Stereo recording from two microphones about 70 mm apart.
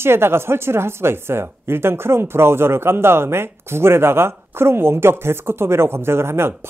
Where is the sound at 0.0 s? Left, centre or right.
Right.